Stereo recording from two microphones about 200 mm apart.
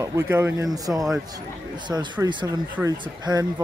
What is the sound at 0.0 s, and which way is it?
Speech, 15° right (ahead or behind).